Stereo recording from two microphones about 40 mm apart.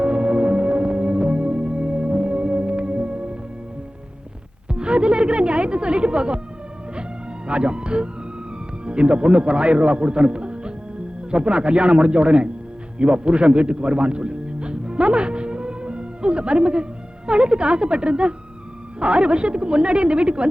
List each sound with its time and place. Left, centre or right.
0.0 s music: right
4.7 s music: right
7.4 s a man's voice: right